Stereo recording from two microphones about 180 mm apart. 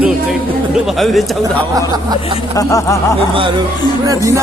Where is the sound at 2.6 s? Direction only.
20° left (ahead or behind).